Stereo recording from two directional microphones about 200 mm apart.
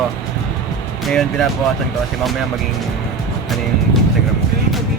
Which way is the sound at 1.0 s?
Centre (ahead or behind).